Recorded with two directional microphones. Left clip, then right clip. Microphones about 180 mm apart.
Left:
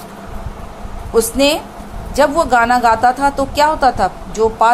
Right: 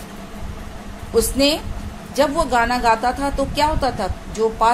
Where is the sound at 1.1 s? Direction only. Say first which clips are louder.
Left 4 dB; 15° left (ahead or behind).